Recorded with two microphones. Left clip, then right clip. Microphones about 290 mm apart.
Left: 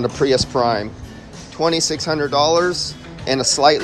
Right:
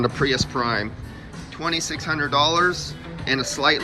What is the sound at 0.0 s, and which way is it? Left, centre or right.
Speech, centre.